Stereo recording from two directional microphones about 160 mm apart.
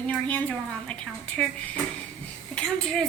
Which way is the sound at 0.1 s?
10° left (ahead or behind).